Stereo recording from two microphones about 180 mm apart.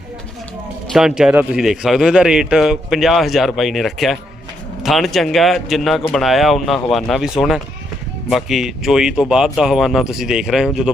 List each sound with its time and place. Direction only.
0.9 s a man's voice: 5° right (ahead or behind)